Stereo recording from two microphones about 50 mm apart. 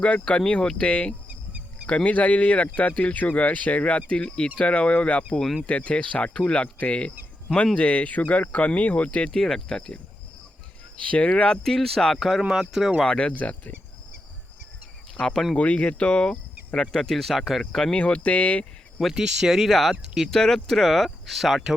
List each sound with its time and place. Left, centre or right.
0.0 s speech: centre
9.4 s speech: centre
11.1 s speech: left; by 12.2 s centre
12.4 s speech: centre
13.1 s speech: centre
15.1 s speech: centre
15.5 s speech: left
17.9 s speech: left
19.1 s speech: centre
20.3 s speech: centre